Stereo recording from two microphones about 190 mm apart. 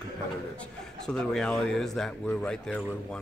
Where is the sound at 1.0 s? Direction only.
5° left (ahead or behind).